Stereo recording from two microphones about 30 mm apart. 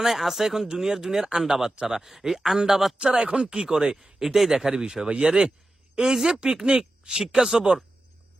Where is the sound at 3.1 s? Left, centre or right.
Right.